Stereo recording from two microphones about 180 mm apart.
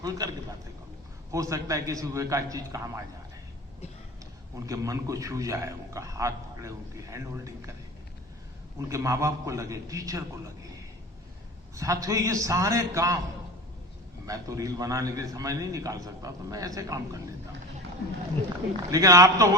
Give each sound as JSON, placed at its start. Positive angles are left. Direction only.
{"t": 0.0, "sound": "a man's voice", "side_deg": -20}
{"t": 1.3, "sound": "a man's voice", "side_deg": -15}
{"t": 4.5, "sound": "a man's voice", "side_deg": -20}
{"t": 8.9, "sound": "a man's voice", "side_deg": -15}
{"t": 11.7, "sound": "a man's voice", "side_deg": -20}
{"t": 14.3, "sound": "a man's voice", "side_deg": -20}
{"t": 18.9, "sound": "a man's voice", "side_deg": -20}